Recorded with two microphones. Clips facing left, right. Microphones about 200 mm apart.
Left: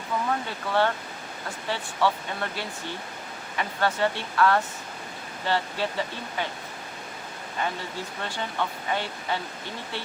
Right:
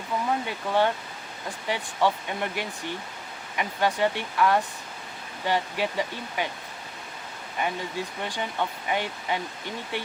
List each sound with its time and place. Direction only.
0.4 s speech: 15° right (ahead or behind)
7.6 s speech: 15° right (ahead or behind)